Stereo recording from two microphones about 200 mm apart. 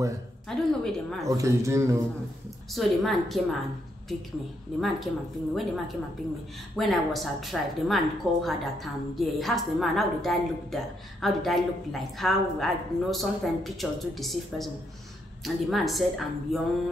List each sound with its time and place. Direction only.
0.5 s a woman's voice: centre (ahead or behind)
1.2 s speech: 15° right (ahead or behind)
2.7 s a woman's voice: centre (ahead or behind)
4.7 s a woman's voice: centre (ahead or behind)